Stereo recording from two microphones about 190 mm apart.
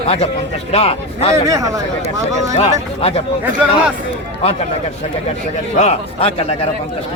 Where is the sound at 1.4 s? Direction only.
20° right (ahead or behind).